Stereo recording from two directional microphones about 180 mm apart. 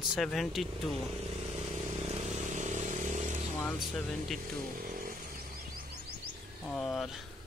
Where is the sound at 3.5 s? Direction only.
5° left (ahead or behind).